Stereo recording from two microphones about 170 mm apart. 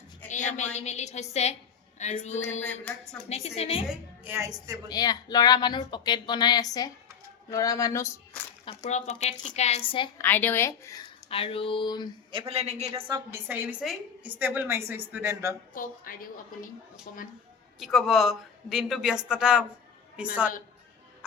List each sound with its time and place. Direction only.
0.3 s a woman's voice: 45° left (ahead or behind)
3.8 s a woman's voice: 15° right (ahead or behind)
4.9 s speech: 25° left (ahead or behind)
8.8 s a woman's voice: 40° left (ahead or behind)
10.2 s a woman's voice: 10° left (ahead or behind)
11.3 s a woman's voice: 35° left (ahead or behind)
12.3 s a man's voice: 35° right (ahead or behind)
13.0 s a woman's voice: 25° right (ahead or behind)
13.3 s a woman's voice: 10° right (ahead or behind)
15.7 s a woman's voice: 55° left (ahead or behind)
17.7 s a woman's voice: centre (ahead or behind)